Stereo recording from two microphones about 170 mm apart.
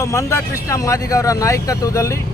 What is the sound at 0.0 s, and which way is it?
Speech, 20° left (ahead or behind).